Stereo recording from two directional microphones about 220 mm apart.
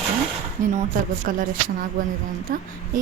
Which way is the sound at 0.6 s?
35° right (ahead or behind).